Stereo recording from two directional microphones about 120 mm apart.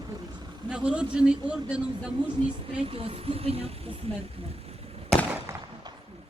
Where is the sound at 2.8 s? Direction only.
50° right (ahead or behind).